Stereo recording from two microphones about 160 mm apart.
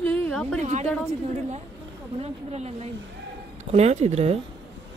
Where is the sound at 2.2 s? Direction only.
40° right (ahead or behind).